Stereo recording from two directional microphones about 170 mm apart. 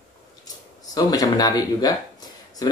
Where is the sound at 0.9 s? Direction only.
20° left (ahead or behind).